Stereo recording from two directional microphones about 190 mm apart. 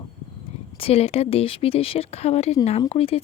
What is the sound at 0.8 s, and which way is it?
Speech, 30° left (ahead or behind).